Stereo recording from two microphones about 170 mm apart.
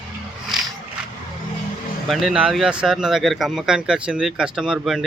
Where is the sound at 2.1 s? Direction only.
5° right (ahead or behind).